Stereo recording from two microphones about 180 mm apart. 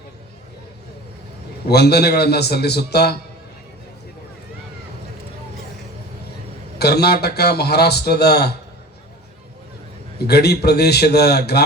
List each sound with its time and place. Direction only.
1.6 s a man's voice: 65° left (ahead or behind)
6.7 s a man's voice: 65° left (ahead or behind)
10.2 s a man's voice: 65° left (ahead or behind)